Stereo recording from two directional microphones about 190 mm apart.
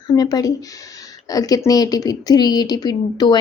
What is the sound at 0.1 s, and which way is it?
Speech, 20° left (ahead or behind).